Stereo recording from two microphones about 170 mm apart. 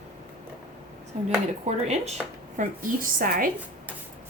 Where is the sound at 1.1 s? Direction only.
40° right (ahead or behind).